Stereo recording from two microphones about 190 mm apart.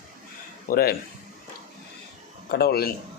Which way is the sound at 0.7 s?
50° left (ahead or behind).